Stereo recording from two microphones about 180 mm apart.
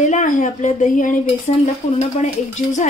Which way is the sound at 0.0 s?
45° left (ahead or behind).